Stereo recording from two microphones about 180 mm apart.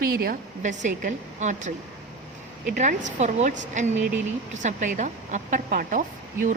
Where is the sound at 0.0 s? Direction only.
55° right (ahead or behind).